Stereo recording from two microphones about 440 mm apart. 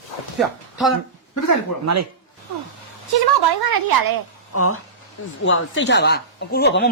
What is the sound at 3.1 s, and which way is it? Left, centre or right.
A woman's voice, right.